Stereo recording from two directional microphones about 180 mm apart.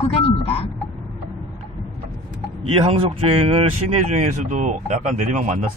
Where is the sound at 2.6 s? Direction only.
30° right (ahead or behind).